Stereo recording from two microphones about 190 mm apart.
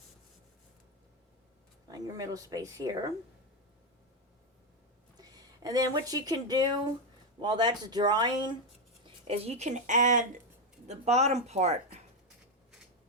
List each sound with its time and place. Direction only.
1.9 s speech: 20° right (ahead or behind)
5.1 s speech: 20° right (ahead or behind)
9.2 s speech: 30° right (ahead or behind)